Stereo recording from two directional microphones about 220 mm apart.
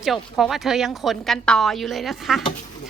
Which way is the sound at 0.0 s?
Centre (ahead or behind).